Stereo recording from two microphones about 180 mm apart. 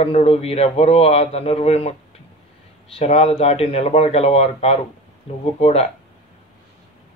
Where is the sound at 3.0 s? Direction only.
35° left (ahead or behind).